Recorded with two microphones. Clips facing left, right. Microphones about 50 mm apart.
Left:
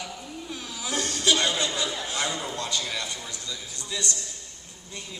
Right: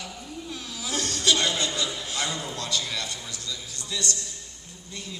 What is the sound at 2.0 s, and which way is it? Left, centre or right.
A man's voice, centre.